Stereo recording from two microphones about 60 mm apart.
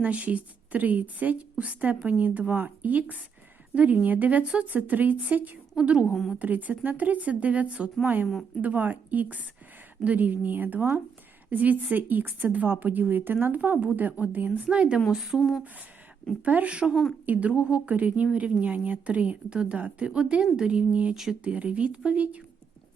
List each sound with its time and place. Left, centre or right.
0.0 s a woman's voice: right
8.0 s a woman's voice: right
15.1 s a woman's voice: centre
16.4 s a woman's voice: right